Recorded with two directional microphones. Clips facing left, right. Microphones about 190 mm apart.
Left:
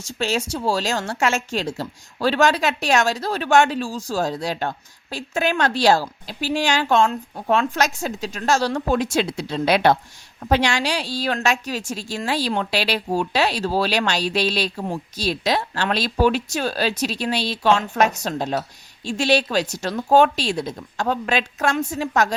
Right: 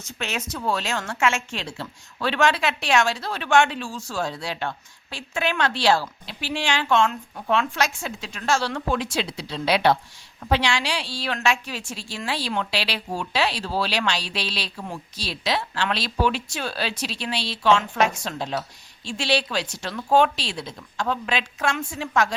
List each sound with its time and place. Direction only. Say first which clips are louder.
0.2 s a woman's voice: left 7 dB; 30° left (ahead or behind)